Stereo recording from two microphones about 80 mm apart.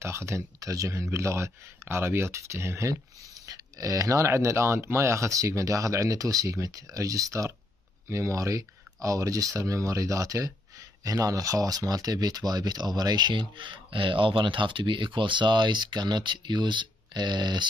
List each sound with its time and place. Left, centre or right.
0.0 s speech: right